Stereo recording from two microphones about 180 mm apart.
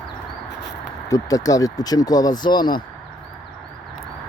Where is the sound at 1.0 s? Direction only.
20° left (ahead or behind).